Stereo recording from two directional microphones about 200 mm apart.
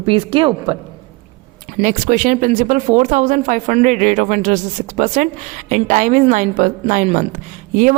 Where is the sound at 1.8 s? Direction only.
40° right (ahead or behind).